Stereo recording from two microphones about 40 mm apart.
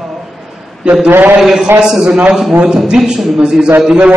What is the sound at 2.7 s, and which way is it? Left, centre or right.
Speech, centre.